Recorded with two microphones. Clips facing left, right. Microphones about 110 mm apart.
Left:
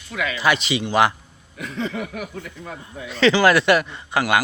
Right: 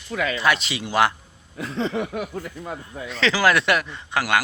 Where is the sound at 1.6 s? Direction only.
30° right (ahead or behind).